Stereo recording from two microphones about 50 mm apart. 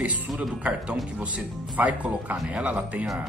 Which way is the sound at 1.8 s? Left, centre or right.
Right.